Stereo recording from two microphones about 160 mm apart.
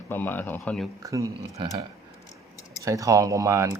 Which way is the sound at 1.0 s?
20° right (ahead or behind).